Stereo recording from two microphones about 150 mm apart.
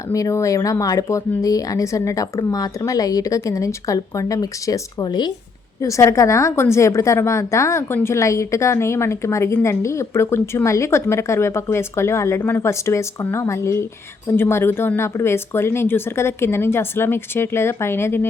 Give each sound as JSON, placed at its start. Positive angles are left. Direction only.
{"t": 0.1, "sound": "a woman's voice", "side_deg": 20}